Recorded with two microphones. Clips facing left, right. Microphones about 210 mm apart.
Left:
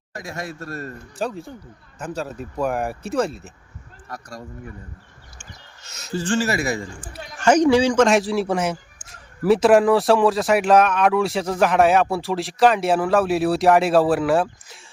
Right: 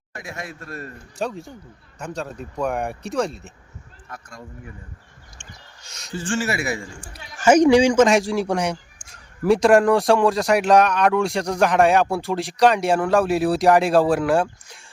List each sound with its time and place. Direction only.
0.1 s a man's voice: 40° left (ahead or behind)
1.2 s a man's voice: centre (ahead or behind)
4.1 s a man's voice: 40° left (ahead or behind)
5.4 s a sound: 5° left (ahead or behind)
6.1 s a man's voice: 35° left (ahead or behind)
7.3 s a man's voice: 10° right (ahead or behind)
8.0 s a man's voice: centre (ahead or behind)